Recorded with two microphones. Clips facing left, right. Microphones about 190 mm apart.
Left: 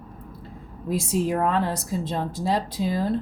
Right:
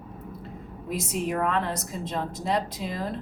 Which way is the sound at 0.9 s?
30° left (ahead or behind).